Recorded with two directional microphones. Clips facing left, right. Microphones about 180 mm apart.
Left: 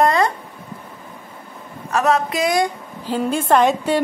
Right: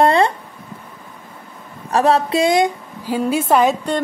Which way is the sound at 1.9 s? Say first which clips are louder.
Right 3 dB; 30° right (ahead or behind).